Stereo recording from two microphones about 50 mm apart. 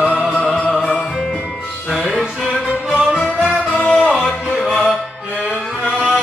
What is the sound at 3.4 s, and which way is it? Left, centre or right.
Music, left.